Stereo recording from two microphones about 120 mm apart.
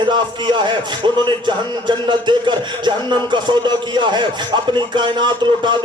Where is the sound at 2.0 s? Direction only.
40° right (ahead or behind).